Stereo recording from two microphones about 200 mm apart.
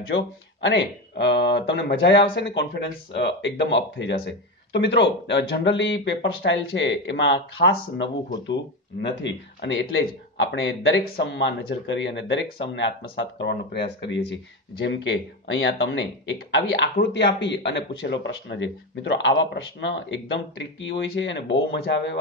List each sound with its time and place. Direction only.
0.0 s speech: 70° left (ahead or behind)